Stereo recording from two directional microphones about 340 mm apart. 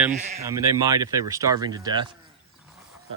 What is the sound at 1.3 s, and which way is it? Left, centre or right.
Speech, centre.